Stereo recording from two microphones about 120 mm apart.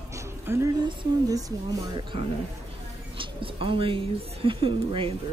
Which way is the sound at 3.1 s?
45° right (ahead or behind).